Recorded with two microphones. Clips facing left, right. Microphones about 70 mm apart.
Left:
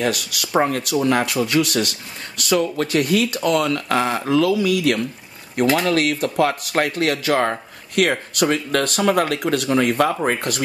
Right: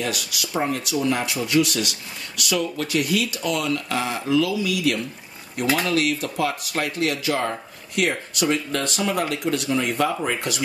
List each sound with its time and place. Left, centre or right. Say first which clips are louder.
0.0 s speech: left 5 dB; left